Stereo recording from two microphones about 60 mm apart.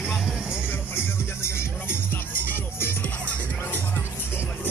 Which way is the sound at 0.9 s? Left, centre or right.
Left.